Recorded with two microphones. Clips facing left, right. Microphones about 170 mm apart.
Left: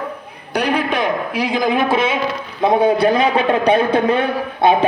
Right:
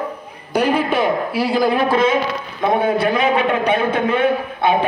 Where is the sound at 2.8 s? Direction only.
35° left (ahead or behind).